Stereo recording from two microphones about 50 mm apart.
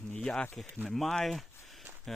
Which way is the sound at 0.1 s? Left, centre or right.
Centre.